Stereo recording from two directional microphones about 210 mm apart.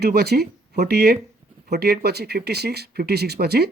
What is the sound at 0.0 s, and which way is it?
Speech, 50° right (ahead or behind).